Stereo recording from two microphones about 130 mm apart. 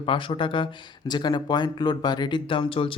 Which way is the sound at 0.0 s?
40° left (ahead or behind).